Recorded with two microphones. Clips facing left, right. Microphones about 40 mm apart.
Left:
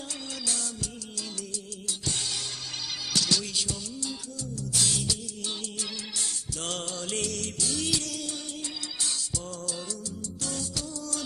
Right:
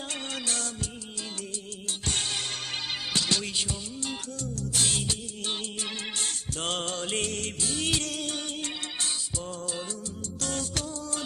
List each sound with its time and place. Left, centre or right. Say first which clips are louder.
0.4 s music of bollywood: right 1 dB; right
2.0 s music: right 3 dB; right
10.4 s music: right 3 dB; right